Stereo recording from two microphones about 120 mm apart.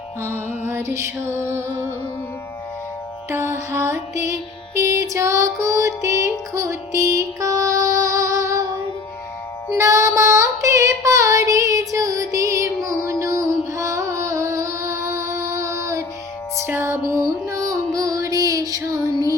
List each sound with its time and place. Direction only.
0.2 s music: 20° right (ahead or behind)
3.2 s music: 20° right (ahead or behind)
9.7 s female singing: 25° right (ahead or behind)
13.1 s music: 25° right (ahead or behind)